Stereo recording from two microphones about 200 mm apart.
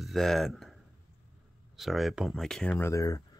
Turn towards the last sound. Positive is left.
turn(degrees=15)  # may be behind; listen again after turning